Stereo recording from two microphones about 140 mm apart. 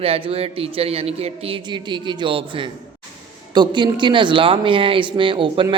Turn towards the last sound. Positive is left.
turn(degrees=-35)  # may be behind; listen again after turning